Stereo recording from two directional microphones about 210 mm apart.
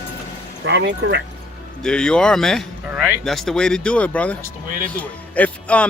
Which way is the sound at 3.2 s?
Centre (ahead or behind).